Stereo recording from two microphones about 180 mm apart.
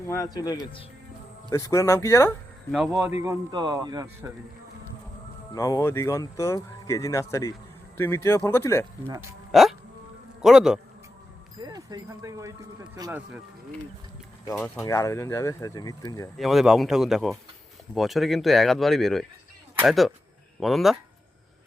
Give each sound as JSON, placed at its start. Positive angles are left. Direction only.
{"t": 0.1, "sound": "speech", "side_deg": 20}
{"t": 3.2, "sound": "a man's voice", "side_deg": -20}
{"t": 5.5, "sound": "speech", "side_deg": 20}
{"t": 9.5, "sound": "a sound", "side_deg": 0}
{"t": 10.4, "sound": "speech", "side_deg": -5}
{"t": 11.6, "sound": "a man's voice", "side_deg": -20}
{"t": 14.8, "sound": "speech", "side_deg": 15}
{"t": 16.4, "sound": "speech", "side_deg": 0}